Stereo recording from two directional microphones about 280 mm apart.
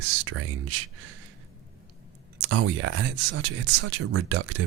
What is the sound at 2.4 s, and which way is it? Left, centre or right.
Speech, right.